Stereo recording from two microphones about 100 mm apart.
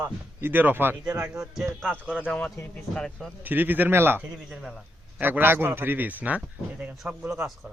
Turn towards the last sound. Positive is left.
turn(degrees=-15)  # may be behind; listen again after turning